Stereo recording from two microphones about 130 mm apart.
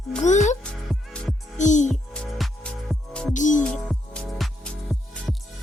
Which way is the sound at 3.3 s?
75° left (ahead or behind).